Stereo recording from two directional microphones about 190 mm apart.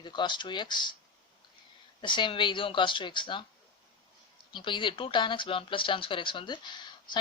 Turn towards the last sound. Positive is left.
turn(degrees=25)  # may be behind; listen again after turning